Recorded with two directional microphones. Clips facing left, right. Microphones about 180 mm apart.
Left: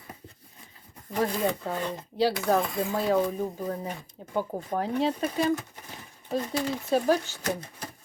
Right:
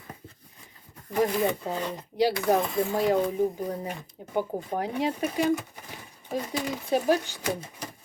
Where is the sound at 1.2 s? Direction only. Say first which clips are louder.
Right 2 dB; 15° right (ahead or behind).